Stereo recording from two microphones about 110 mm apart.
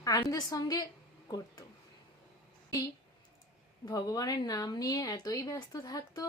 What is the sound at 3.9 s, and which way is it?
Speech, 30° left (ahead or behind).